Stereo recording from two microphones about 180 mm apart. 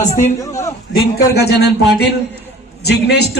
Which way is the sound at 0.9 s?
60° left (ahead or behind).